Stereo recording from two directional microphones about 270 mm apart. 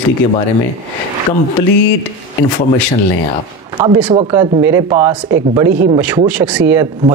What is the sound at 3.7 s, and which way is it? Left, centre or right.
Speech, centre.